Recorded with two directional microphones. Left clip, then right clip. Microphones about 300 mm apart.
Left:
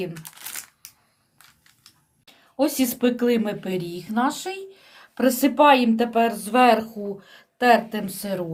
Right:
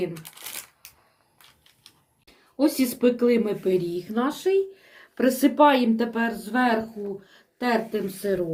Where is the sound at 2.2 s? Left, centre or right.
Left.